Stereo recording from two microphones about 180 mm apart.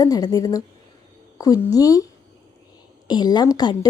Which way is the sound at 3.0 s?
25° left (ahead or behind).